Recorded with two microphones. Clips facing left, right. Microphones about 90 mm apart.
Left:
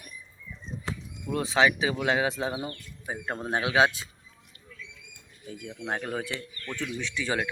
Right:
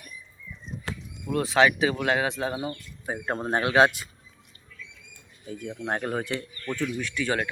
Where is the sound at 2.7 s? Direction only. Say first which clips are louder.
Right 3 dB; 20° right (ahead or behind).